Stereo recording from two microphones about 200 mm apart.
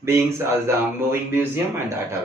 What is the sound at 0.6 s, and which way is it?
Speech, 10° right (ahead or behind).